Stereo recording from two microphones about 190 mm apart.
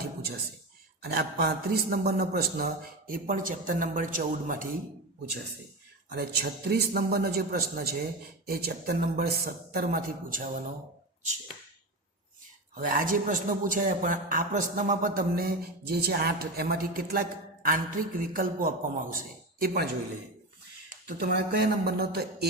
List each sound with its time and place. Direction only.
1.0 s a man's voice: 55° right (ahead or behind)
6.1 s a man's voice: 55° right (ahead or behind)
12.7 s a man's voice: 45° right (ahead or behind)
21.1 s a man's voice: 55° right (ahead or behind)